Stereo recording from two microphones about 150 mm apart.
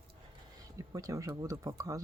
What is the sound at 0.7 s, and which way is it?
Speech, 20° right (ahead or behind).